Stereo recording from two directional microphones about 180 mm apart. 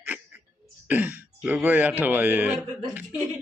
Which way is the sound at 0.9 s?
10° right (ahead or behind).